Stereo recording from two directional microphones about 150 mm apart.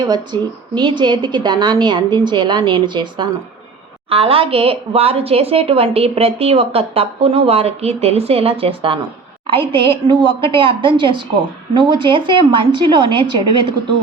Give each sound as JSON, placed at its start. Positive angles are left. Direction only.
{"t": 0.1, "sound": "a woman's voice", "side_deg": -30}